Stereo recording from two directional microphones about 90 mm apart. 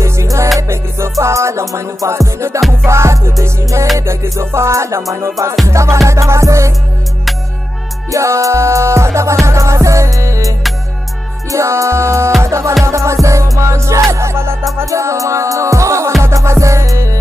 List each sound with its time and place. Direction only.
0.0 s music: 35° right (ahead or behind)
8.1 s music: 35° right (ahead or behind)
11.5 s music: 35° right (ahead or behind)